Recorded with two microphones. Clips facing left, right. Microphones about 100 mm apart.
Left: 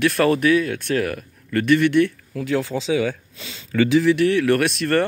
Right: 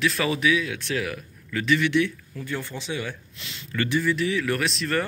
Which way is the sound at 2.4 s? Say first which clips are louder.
Left 10 dB; 90° left.